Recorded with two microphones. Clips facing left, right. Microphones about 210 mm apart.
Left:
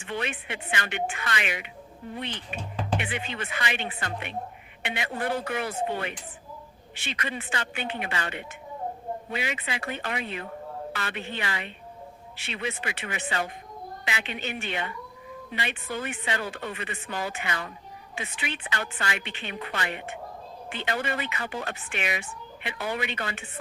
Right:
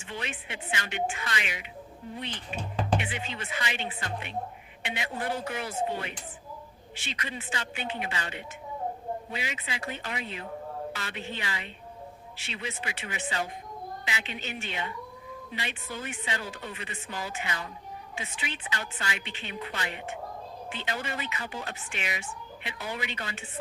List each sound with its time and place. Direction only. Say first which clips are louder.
0.0 s speech: left 5 dB; 60° left (ahead or behind)
3.0 s speech: left 3 dB; 60° left (ahead or behind)